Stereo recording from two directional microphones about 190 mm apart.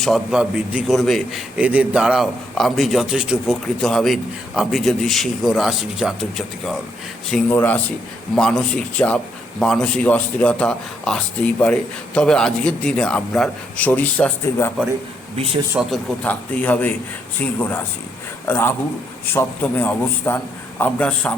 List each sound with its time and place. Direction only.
0.0 s a man's voice: centre (ahead or behind)
15.9 s a man's voice: 5° left (ahead or behind)